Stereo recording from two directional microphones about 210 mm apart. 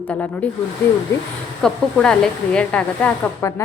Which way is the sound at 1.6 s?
5° left (ahead or behind).